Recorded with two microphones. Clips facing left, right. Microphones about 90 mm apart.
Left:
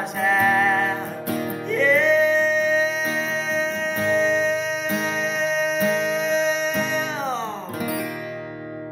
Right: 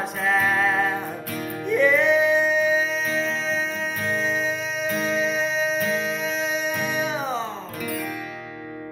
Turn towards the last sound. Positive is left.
turn(degrees=25)  # may be behind; listen again after turning